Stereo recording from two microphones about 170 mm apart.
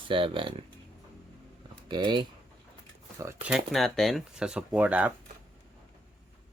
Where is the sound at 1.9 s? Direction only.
25° right (ahead or behind).